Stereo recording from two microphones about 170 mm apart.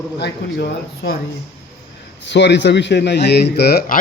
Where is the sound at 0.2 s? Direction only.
70° left (ahead or behind).